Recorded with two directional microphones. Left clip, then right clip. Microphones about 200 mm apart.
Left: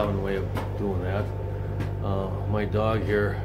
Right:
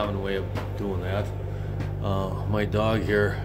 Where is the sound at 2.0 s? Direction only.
40° right (ahead or behind).